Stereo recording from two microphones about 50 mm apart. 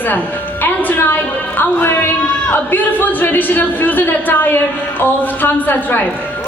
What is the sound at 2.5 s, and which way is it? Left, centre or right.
Speech, left.